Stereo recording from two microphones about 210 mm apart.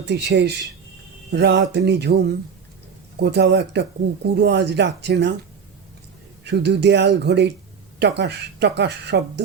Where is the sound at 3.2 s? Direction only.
55° right (ahead or behind).